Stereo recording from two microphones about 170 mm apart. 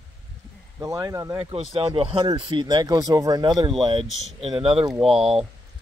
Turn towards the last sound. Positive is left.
turn(degrees=-35)  # may be behind; listen again after turning